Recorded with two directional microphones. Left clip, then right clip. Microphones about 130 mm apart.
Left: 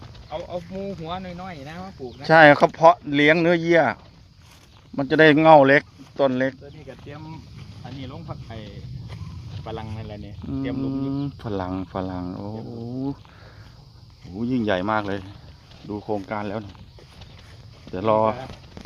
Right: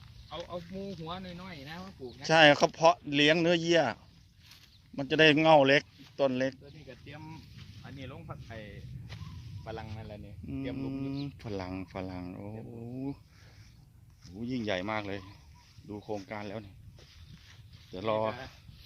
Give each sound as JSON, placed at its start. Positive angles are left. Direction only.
{"t": 1.1, "sound": "speech", "side_deg": -85}
{"t": 2.2, "sound": "speech", "side_deg": -10}
{"t": 2.9, "sound": "speech", "side_deg": -40}
{"t": 3.2, "sound": "speech", "side_deg": -15}
{"t": 4.9, "sound": "speech", "side_deg": -10}
{"t": 8.0, "sound": "speech", "side_deg": 75}
{"t": 9.6, "sound": "speech", "side_deg": 80}
{"t": 10.8, "sound": "speech", "side_deg": 5}
{"t": 14.3, "sound": "speech", "side_deg": 15}
{"t": 17.9, "sound": "speech", "side_deg": 15}